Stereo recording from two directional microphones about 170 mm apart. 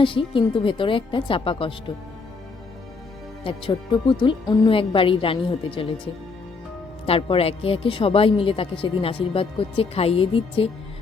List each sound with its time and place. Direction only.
0.0 s a woman's voice: 30° left (ahead or behind)
3.4 s a woman's voice: 30° left (ahead or behind)
7.0 s a woman's voice: 30° left (ahead or behind)